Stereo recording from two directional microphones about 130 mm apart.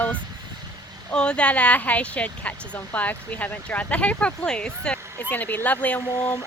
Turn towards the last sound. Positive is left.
turn(degrees=10)  # may be behind; listen again after turning